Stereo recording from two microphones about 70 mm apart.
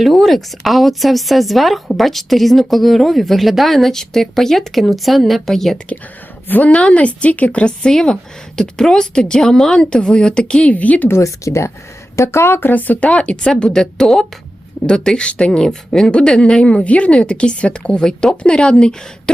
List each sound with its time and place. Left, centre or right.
0.0 s a woman's voice: centre
6.5 s speech: centre
11.1 s speech: left; by 19.3 s centre